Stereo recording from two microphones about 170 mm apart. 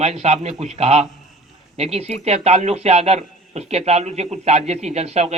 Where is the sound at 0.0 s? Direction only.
40° right (ahead or behind).